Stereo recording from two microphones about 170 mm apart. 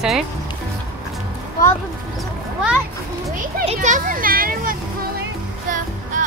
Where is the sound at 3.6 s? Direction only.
45° right (ahead or behind).